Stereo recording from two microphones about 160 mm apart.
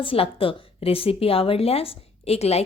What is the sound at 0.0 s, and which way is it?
A woman's voice, 35° left (ahead or behind).